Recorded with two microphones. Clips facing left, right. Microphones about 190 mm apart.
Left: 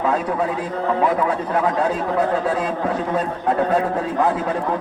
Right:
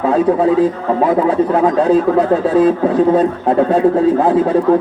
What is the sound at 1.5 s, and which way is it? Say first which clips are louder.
Speech: right 6 dB; 25° right (ahead or behind).